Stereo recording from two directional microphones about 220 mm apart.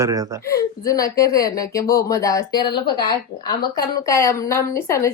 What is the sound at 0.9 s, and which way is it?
A woman's voice, 15° left (ahead or behind).